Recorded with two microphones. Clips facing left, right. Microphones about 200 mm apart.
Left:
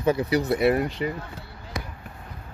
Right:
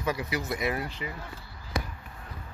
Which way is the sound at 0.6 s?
55° left (ahead or behind).